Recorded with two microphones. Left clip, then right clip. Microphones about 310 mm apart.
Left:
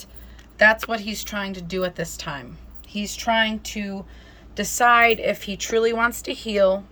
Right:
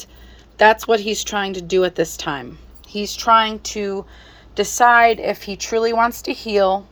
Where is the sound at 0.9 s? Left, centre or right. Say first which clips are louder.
Right 10 dB; centre.